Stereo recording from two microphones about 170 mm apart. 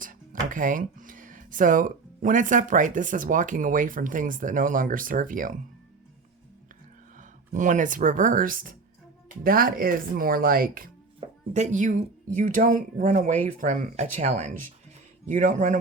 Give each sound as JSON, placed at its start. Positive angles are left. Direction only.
{"t": 0.0, "sound": "speech", "side_deg": -50}
{"t": 7.2, "sound": "speech", "side_deg": -50}
{"t": 11.5, "sound": "speech", "side_deg": -45}